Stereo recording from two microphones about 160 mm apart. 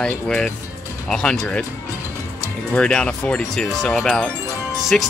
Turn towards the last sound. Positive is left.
turn(degrees=5)  # may be behind; listen again after turning